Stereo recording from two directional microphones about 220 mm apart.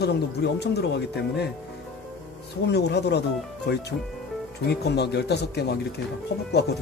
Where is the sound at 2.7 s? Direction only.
50° left (ahead or behind).